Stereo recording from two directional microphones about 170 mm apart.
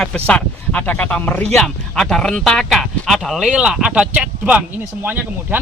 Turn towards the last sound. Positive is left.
turn(degrees=-10)  # may be behind; listen again after turning